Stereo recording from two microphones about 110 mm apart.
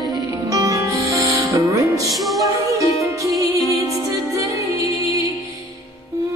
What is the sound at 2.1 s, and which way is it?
Music, centre (ahead or behind).